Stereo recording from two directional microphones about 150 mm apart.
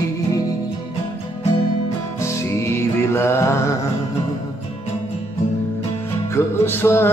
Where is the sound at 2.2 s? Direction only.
20° left (ahead or behind).